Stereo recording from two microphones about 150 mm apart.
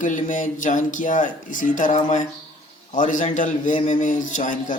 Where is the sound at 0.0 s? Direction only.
60° left (ahead or behind).